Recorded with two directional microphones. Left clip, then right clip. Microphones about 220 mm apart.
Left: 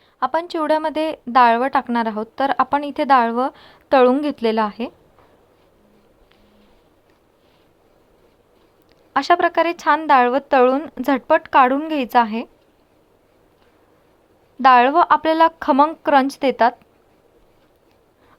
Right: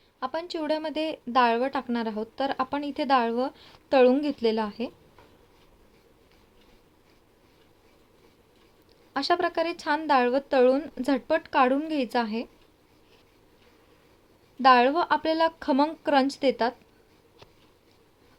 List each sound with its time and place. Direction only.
0.2 s a woman's voice: 20° left (ahead or behind)
9.1 s a woman's voice: 15° left (ahead or behind)
14.6 s a woman's voice: 15° left (ahead or behind)